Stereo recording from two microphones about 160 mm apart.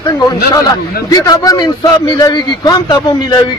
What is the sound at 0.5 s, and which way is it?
A man's voice, 20° left (ahead or behind).